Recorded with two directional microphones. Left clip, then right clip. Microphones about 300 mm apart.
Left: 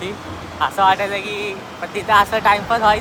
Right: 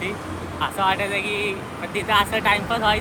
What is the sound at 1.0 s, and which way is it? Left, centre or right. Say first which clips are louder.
Speech: left 1 dB; left.